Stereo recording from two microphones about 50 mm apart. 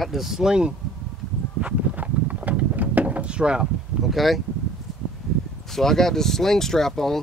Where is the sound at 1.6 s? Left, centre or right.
Right.